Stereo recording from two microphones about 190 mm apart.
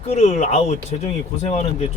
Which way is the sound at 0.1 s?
35° left (ahead or behind).